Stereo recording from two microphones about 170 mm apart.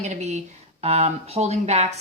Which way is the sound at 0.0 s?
40° right (ahead or behind).